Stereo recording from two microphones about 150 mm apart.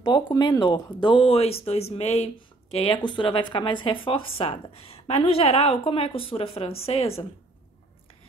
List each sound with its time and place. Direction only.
0.0 s speech: 30° left (ahead or behind)